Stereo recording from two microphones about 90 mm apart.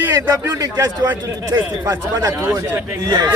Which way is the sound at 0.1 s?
35° right (ahead or behind).